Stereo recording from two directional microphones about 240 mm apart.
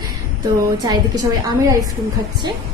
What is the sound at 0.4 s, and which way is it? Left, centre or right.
Speech, centre.